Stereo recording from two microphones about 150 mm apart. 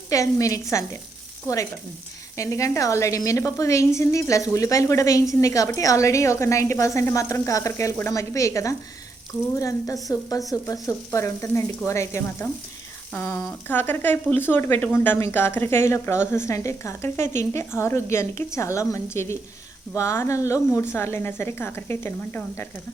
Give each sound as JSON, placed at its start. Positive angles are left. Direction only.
{"t": 0.1, "sound": "speech", "side_deg": 20}
{"t": 2.3, "sound": "speech", "side_deg": 20}